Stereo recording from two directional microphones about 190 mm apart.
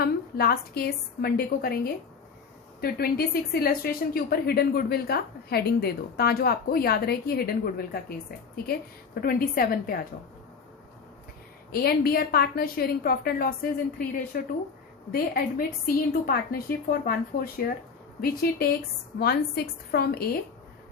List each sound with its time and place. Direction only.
0.0 s a woman's voice: 55° left (ahead or behind)
9.2 s a woman's voice: 50° left (ahead or behind)
11.7 s a woman's voice: 55° left (ahead or behind)